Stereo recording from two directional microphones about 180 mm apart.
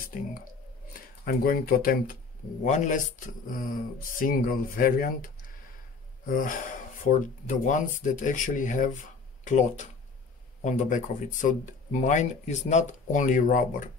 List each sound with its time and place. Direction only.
1.2 s speech: 55° left (ahead or behind)
4.2 s speech: 50° left (ahead or behind)